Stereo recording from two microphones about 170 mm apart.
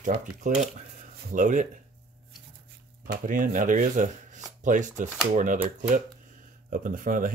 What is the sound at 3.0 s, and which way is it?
Chopping, 55° right (ahead or behind).